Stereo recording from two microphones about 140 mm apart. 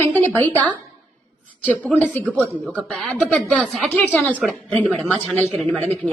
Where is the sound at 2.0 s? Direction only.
10° left (ahead or behind).